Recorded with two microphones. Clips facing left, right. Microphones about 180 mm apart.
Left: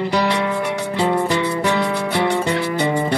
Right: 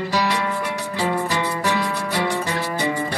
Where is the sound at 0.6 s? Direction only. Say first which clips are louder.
Left 4 dB; 60° left (ahead or behind).